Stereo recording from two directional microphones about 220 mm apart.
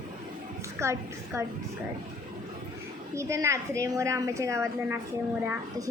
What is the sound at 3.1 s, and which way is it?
A woman's voice, 15° right (ahead or behind).